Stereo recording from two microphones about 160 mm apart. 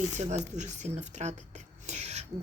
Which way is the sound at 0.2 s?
45° right (ahead or behind).